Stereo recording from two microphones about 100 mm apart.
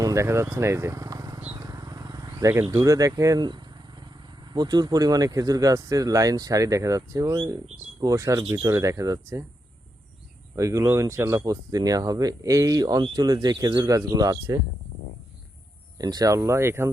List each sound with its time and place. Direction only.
0.0 s speech: 30° right (ahead or behind)
1.5 s wild animals: 35° right (ahead or behind)
2.6 s speech: 35° right (ahead or behind)
3.4 s speech: 45° right (ahead or behind)
10.5 s speech: 30° right (ahead or behind)
16.0 s speech: 40° right (ahead or behind)